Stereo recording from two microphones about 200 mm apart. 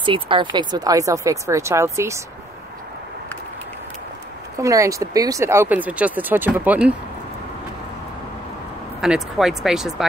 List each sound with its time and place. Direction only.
0.0 s speech: 25° right (ahead or behind)
4.6 s speech: 15° right (ahead or behind)
9.0 s speech: 5° right (ahead or behind)